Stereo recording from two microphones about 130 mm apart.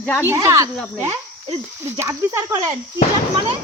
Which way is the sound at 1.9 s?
20° right (ahead or behind).